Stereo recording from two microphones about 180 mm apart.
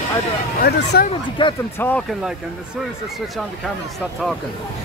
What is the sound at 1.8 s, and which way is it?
Speech, 10° left (ahead or behind).